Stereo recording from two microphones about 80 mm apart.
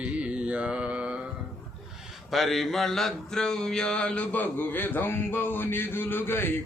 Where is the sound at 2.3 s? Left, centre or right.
Centre.